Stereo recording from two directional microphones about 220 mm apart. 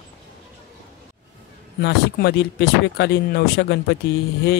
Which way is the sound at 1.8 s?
45° left (ahead or behind).